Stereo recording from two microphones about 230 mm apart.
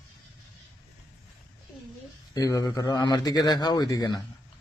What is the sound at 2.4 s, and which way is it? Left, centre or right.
A man's voice, centre.